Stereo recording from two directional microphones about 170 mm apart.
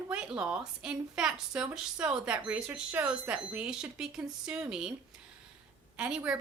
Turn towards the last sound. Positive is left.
turn(degrees=-5)  # may be behind; listen again after turning